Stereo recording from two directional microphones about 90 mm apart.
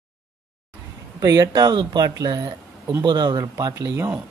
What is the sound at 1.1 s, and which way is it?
Speech, 45° right (ahead or behind).